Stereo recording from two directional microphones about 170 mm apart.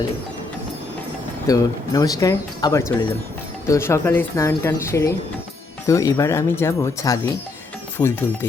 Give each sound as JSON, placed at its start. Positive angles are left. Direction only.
{"t": 1.5, "sound": "speech", "side_deg": 20}